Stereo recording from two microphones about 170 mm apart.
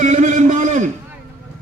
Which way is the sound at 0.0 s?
50° right (ahead or behind).